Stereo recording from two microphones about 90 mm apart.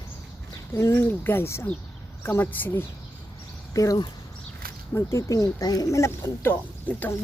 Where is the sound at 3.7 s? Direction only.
40° left (ahead or behind).